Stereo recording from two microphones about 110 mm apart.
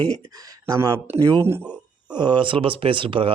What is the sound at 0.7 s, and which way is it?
Speech, 30° right (ahead or behind).